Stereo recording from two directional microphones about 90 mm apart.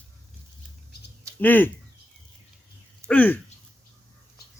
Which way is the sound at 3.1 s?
20° left (ahead or behind).